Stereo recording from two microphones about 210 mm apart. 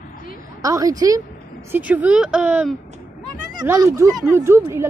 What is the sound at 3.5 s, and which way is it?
A woman's voice, 15° right (ahead or behind).